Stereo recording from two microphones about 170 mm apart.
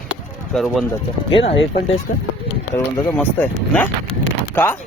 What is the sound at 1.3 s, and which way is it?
Speech, 30° left (ahead or behind).